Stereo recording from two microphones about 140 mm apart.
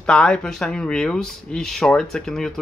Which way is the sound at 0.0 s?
5° left (ahead or behind).